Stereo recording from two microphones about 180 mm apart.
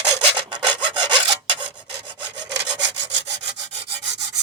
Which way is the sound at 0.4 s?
25° right (ahead or behind).